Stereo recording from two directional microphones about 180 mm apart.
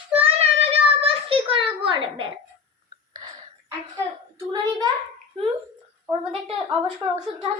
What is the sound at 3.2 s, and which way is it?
Whispering, 25° right (ahead or behind).